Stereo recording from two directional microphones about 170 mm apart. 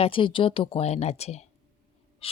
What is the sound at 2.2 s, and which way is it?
Breathing, 35° left (ahead or behind).